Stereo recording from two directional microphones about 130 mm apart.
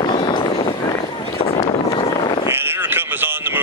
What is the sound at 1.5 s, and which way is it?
Vehicle, 45° left (ahead or behind).